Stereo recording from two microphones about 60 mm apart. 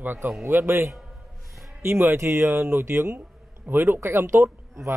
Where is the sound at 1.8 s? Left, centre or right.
Right.